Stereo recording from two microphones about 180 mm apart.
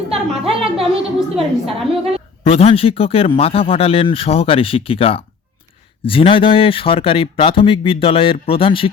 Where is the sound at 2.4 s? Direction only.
35° left (ahead or behind).